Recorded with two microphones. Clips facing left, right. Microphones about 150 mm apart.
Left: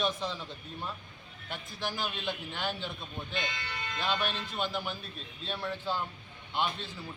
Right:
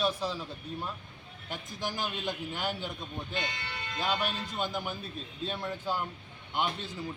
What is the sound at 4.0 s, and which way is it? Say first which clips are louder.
A man's voice: right 1 dB; 15° right (ahead or behind).